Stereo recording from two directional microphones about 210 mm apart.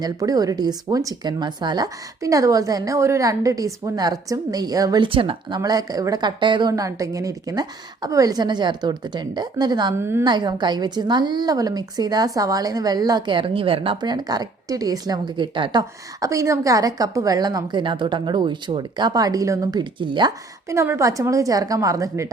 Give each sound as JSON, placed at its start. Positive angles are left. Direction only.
{"t": 0.0, "sound": "speech", "side_deg": -15}